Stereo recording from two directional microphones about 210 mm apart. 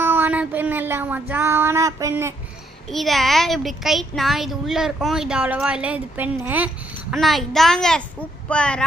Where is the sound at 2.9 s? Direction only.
Centre (ahead or behind).